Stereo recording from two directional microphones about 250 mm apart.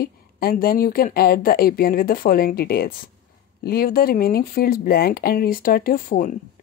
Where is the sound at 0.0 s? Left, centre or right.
Left.